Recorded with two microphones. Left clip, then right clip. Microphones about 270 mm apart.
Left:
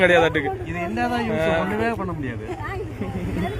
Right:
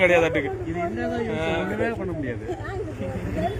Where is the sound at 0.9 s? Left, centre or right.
Left.